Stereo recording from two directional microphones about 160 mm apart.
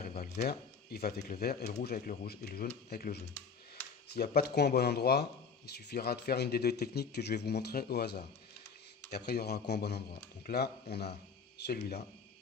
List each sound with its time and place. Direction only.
0.4 s speech: 70° left (ahead or behind)